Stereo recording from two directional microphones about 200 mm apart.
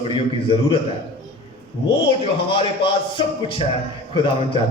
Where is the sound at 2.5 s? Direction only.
25° left (ahead or behind).